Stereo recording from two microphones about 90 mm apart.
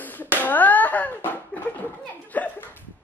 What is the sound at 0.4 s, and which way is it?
Slap, 20° left (ahead or behind).